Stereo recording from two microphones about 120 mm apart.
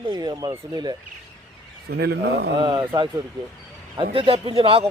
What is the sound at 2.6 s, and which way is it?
Speech, 35° right (ahead or behind).